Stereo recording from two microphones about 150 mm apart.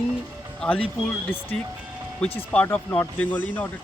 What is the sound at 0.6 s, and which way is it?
Speech, 5° left (ahead or behind).